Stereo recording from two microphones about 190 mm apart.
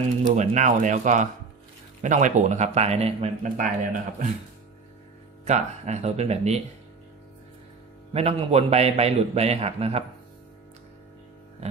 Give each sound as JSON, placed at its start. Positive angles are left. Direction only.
{"t": 0.2, "sound": "speech", "side_deg": -40}
{"t": 5.4, "sound": "speech", "side_deg": -35}
{"t": 8.1, "sound": "speech", "side_deg": -30}